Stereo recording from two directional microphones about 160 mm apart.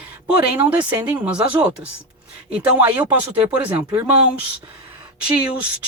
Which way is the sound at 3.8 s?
20° right (ahead or behind).